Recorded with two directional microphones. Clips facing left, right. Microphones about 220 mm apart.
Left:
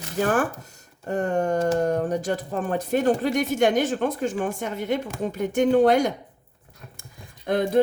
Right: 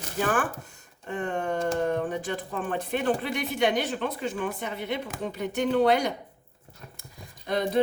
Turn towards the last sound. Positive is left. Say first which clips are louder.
# left 5 dB
turn(degrees=50)  # may be behind; listen again after turning